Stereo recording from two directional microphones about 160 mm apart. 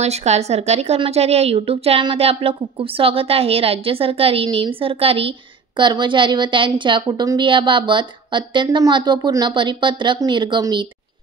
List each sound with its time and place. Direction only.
0.0 s a woman's voice: 45° right (ahead or behind)